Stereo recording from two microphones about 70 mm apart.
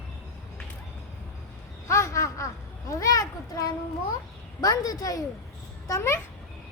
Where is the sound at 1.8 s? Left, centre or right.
Left.